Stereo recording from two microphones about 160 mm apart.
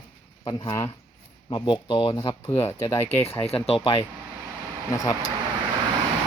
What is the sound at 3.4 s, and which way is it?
Speech, 40° left (ahead or behind).